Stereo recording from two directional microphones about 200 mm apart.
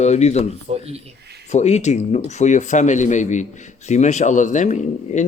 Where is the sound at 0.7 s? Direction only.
30° right (ahead or behind).